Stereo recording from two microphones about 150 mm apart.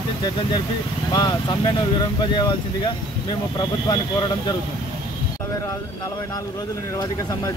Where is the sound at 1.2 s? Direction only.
25° left (ahead or behind).